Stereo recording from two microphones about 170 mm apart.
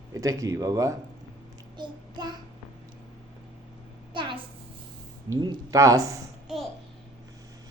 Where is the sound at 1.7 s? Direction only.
25° right (ahead or behind).